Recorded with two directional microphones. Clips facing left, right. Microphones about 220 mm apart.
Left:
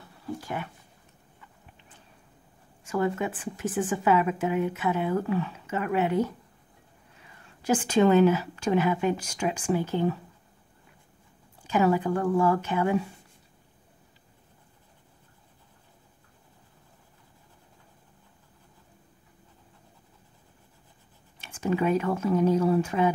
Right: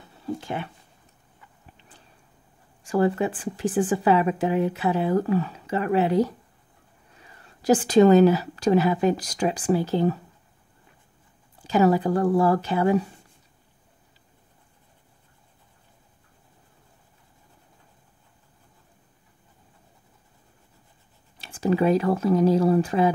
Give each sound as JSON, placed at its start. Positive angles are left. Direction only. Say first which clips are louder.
{"t": 0.4, "sound": "a sound", "louder": "right 3 dB", "side_deg": -25}
{"t": 2.8, "sound": "speech", "louder": "right 5 dB", "side_deg": -35}
{"t": 7.6, "sound": "speech", "louder": "right 5 dB", "side_deg": -35}
{"t": 11.6, "sound": "speech", "louder": "right 4 dB", "side_deg": -35}
{"t": 21.4, "sound": "speech", "louder": "right 4 dB", "side_deg": -35}